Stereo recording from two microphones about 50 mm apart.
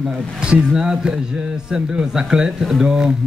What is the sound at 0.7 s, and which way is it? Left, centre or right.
A man's voice, centre.